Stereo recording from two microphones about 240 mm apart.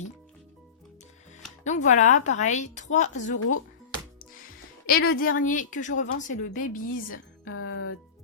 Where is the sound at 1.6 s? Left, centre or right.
Left.